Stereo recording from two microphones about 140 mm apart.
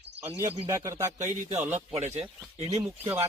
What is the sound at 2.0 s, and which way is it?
Speech, 50° right (ahead or behind).